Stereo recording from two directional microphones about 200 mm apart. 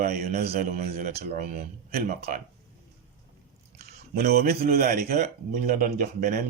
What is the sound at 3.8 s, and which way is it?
Speech, 50° right (ahead or behind).